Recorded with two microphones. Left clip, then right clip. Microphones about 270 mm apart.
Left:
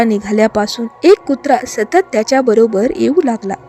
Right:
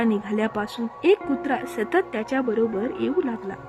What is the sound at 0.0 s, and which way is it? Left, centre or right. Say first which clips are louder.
A woman's voice: left 12 dB; left.